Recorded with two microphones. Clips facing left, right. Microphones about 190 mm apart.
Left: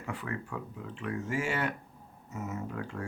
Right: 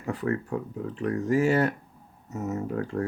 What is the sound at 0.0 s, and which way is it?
Speech, 40° right (ahead or behind).